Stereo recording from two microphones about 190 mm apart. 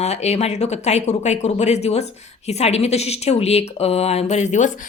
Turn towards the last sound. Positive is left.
turn(degrees=40)  # may be behind; listen again after turning